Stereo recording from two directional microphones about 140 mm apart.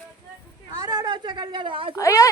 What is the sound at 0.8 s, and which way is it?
A woman's voice, 30° right (ahead or behind).